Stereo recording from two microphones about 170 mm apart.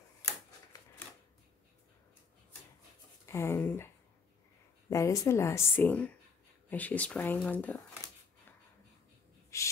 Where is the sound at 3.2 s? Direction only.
15° left (ahead or behind).